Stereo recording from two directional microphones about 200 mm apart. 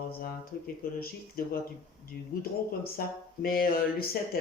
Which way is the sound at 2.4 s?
50° left (ahead or behind).